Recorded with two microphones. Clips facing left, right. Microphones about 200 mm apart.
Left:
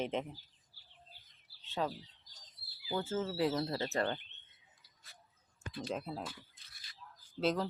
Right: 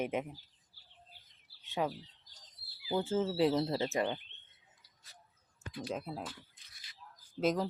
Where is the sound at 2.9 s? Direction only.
20° right (ahead or behind).